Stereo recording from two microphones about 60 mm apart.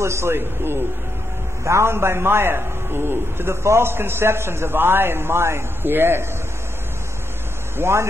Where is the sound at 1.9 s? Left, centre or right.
Right.